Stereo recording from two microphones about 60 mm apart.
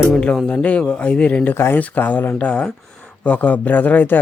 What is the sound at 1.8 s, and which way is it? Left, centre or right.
Speech, left.